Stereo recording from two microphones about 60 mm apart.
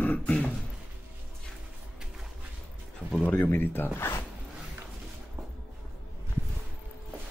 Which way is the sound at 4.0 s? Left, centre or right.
Left.